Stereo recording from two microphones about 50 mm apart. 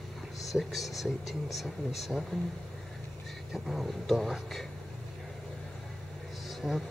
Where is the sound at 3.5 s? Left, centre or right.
Centre.